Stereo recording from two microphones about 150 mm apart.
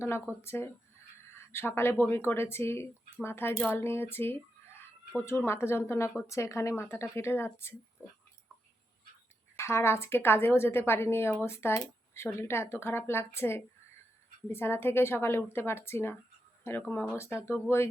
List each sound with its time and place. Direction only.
0.4 s speech: 15° left (ahead or behind)
9.6 s speech: 20° left (ahead or behind)